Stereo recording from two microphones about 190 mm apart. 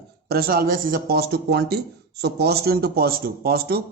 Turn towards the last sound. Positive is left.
turn(degrees=-55)  # may be behind; listen again after turning